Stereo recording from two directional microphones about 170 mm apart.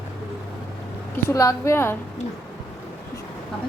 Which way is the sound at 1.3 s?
15° left (ahead or behind).